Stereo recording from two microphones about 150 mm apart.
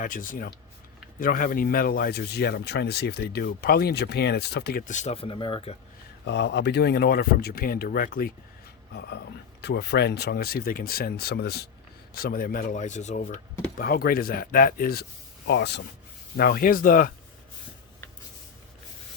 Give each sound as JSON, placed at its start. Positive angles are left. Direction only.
{"t": 0.0, "sound": "speech", "side_deg": 65}
{"t": 4.9, "sound": "speech", "side_deg": 50}
{"t": 6.7, "sound": "speech", "side_deg": 90}
{"t": 9.7, "sound": "speech", "side_deg": 90}
{"t": 16.4, "sound": "speech", "side_deg": 80}